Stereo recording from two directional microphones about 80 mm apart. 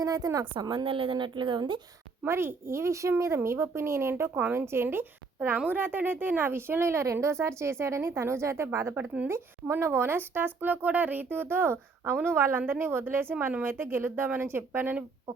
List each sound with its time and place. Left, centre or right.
0.0 s a woman's voice: right
0.6 s a woman's voice: right
2.2 s speech: right
4.4 s speech: centre
4.6 s speech: right